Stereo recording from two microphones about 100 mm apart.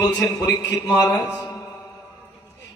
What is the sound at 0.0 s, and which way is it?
A man's voice, 35° left (ahead or behind).